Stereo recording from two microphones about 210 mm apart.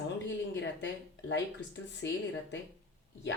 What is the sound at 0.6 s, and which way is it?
Speech, 60° left (ahead or behind).